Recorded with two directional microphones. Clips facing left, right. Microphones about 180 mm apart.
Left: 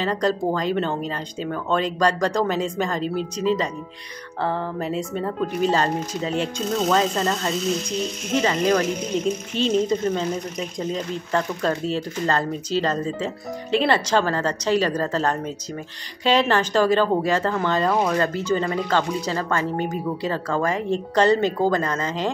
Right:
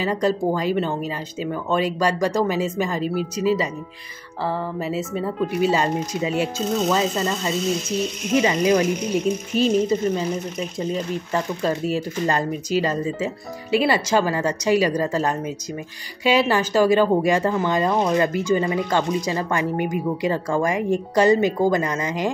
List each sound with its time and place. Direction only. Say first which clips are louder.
0.0 s speech: right 1 dB; 10° right (ahead or behind)